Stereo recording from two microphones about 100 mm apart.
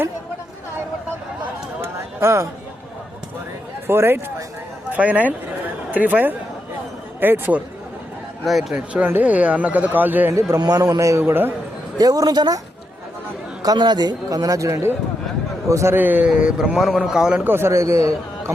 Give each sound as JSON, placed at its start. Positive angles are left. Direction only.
{"t": 1.8, "sound": "a sound", "side_deg": -25}
{"t": 3.8, "sound": "a man's voice", "side_deg": -25}
{"t": 8.7, "sound": "a man's voice", "side_deg": -15}
{"t": 10.6, "sound": "a man's voice", "side_deg": -40}
{"t": 11.9, "sound": "a man's voice", "side_deg": -40}
{"t": 13.6, "sound": "a man's voice", "side_deg": -45}
{"t": 17.4, "sound": "a man's voice", "side_deg": -25}